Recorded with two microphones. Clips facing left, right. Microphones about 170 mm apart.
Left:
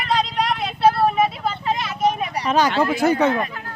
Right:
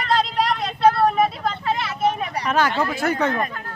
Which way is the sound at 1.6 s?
15° left (ahead or behind).